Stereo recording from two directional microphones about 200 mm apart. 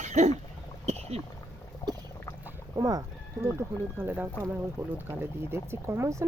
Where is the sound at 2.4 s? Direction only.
15° right (ahead or behind).